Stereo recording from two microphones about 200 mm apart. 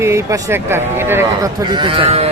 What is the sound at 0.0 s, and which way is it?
A man's voice, 15° right (ahead or behind).